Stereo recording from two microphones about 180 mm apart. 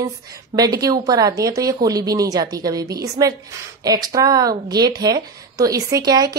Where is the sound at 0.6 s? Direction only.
20° right (ahead or behind).